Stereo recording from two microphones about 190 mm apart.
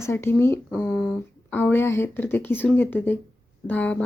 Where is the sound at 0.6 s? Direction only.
Centre (ahead or behind).